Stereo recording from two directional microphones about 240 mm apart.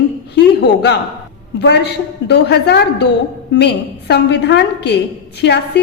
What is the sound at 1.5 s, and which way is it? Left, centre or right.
A woman's voice, left.